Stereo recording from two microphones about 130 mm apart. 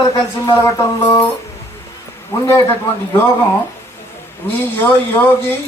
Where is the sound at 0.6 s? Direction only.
20° left (ahead or behind).